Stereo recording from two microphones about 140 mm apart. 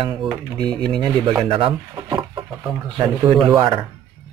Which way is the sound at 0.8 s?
35° right (ahead or behind).